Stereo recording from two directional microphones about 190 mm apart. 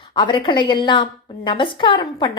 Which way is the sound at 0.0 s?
25° left (ahead or behind).